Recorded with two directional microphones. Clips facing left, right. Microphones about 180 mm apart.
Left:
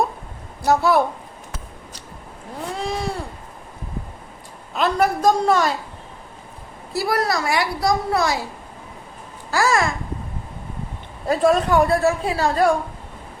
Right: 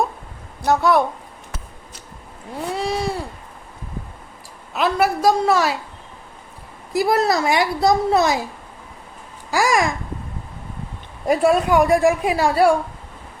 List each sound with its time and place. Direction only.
0.6 s a woman's voice: 5° left (ahead or behind)
2.7 s a sound: 5° right (ahead or behind)
4.7 s a woman's voice: 5° right (ahead or behind)
6.9 s a child's voice: 20° right (ahead or behind)
9.5 s a child's voice: 15° right (ahead or behind)
11.3 s a woman's voice: 10° right (ahead or behind)